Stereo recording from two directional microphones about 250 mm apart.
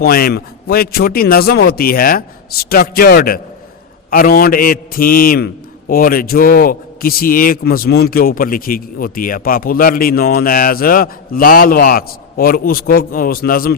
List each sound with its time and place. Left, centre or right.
0.0 s a man's voice: left